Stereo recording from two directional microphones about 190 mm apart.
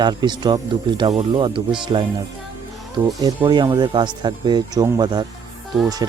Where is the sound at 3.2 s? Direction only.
20° right (ahead or behind).